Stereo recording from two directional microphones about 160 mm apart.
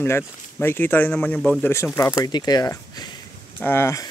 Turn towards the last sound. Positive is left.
turn(degrees=15)  # may be behind; listen again after turning